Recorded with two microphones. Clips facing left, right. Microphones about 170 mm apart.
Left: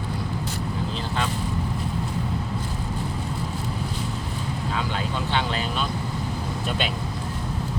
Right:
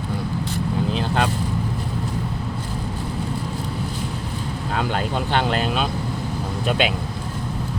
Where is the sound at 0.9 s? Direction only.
60° right (ahead or behind).